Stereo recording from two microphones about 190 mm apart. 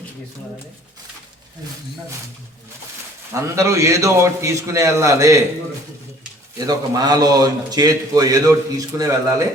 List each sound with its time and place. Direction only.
3.3 s a man's voice: 15° right (ahead or behind)
6.6 s a man's voice: 20° right (ahead or behind)